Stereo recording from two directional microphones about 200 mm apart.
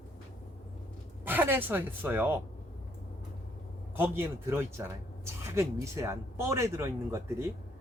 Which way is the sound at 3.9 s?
10° right (ahead or behind).